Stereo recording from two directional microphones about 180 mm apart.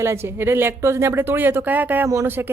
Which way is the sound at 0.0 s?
15° right (ahead or behind).